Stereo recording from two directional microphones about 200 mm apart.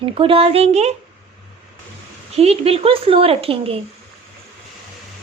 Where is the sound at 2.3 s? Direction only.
30° right (ahead or behind).